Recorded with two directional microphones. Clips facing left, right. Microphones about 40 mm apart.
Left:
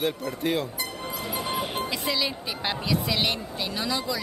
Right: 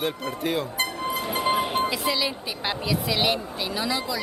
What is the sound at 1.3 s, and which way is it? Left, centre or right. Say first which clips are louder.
Music: right 6 dB; right.